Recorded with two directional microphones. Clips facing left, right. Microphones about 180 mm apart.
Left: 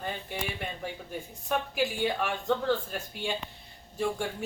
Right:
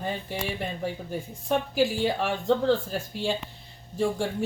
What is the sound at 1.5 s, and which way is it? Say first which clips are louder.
Speech: right 5 dB; 30° right (ahead or behind).